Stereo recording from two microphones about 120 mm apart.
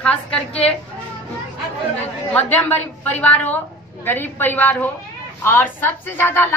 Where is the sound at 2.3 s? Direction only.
15° left (ahead or behind).